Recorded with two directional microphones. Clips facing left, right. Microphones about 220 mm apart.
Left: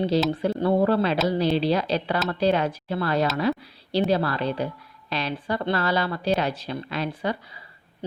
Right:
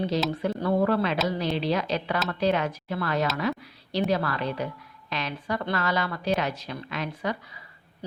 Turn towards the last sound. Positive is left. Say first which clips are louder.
# left 3 dB
turn(degrees=30)  # may be behind; listen again after turning